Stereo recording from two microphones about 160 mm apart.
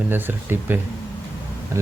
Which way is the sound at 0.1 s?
10° right (ahead or behind).